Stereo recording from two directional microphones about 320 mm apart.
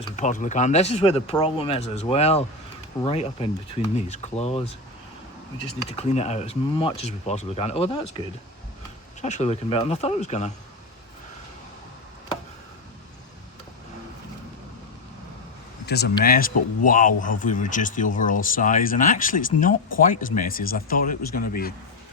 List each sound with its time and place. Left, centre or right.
0.2 s speech: left
6.0 s speech: centre
9.2 s speech: left
15.9 s speech: left